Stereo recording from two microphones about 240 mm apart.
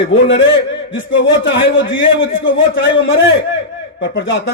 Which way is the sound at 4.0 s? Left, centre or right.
Left.